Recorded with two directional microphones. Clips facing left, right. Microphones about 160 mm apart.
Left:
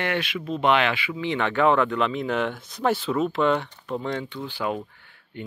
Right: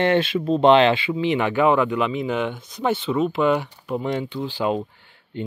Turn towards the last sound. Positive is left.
turn(degrees=-20)  # may be behind; listen again after turning